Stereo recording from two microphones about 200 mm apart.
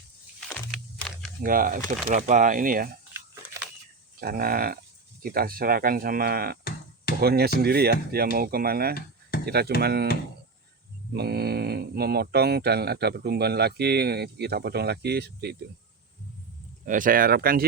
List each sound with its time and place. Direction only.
0.3 s a sound: 5° left (ahead or behind)
1.5 s speech: 45° right (ahead or behind)
4.2 s speech: 50° right (ahead or behind)
11.1 s speech: 55° right (ahead or behind)
16.8 s speech: 40° right (ahead or behind)